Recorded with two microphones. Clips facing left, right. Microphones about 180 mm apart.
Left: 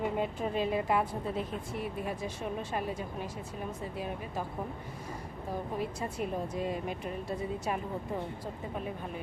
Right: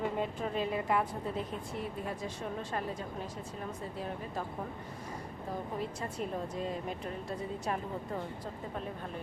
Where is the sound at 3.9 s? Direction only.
10° left (ahead or behind).